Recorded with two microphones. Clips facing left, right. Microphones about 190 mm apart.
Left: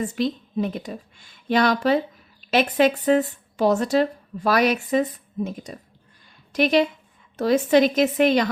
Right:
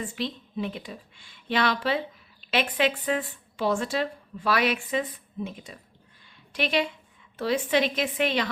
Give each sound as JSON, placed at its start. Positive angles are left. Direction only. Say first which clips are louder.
{"t": 0.0, "sound": "a woman's voice", "louder": "left 8 dB", "side_deg": 45}